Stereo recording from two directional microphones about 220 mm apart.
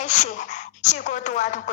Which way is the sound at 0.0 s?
35° left (ahead or behind).